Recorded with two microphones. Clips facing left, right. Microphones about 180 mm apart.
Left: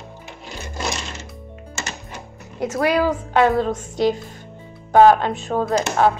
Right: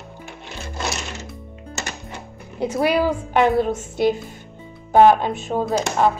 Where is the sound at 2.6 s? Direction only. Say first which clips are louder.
Even; 10° right (ahead or behind).